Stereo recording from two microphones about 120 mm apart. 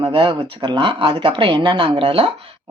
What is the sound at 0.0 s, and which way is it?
Speech, 50° right (ahead or behind).